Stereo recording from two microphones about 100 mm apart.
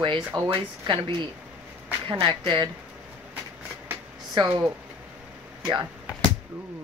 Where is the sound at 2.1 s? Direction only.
55° right (ahead or behind).